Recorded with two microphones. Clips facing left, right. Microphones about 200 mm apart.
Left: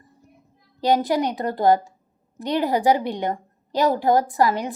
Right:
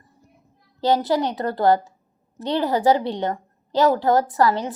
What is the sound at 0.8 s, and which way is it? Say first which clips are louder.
A woman's voice: even; 15° left (ahead or behind).